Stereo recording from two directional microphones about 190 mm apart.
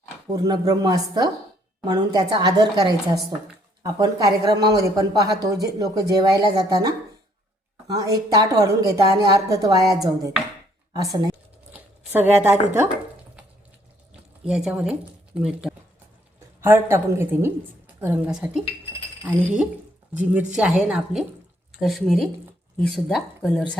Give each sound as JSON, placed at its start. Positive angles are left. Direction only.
{"t": 0.3, "sound": "speech", "side_deg": -20}
{"t": 14.4, "sound": "a woman's voice", "side_deg": -5}
{"t": 20.5, "sound": "speech", "side_deg": -5}